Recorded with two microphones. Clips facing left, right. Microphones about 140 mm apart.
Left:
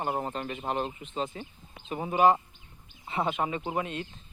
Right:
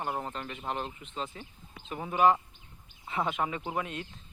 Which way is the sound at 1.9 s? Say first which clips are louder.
Left 2 dB; 15° left (ahead or behind).